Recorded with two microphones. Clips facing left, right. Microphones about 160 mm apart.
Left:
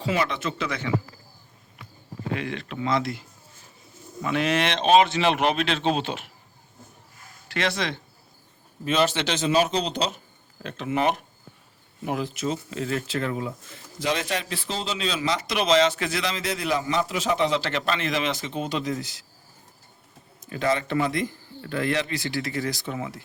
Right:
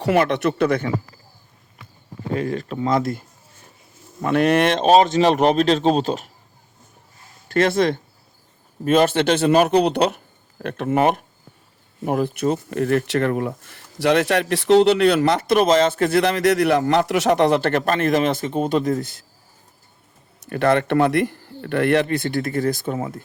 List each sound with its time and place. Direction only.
0.0 s speech: 60° right (ahead or behind)
2.3 s speech: 40° right (ahead or behind)
7.4 s speech: 45° right (ahead or behind)
20.4 s speech: 65° right (ahead or behind); by 23.2 s 40° right (ahead or behind)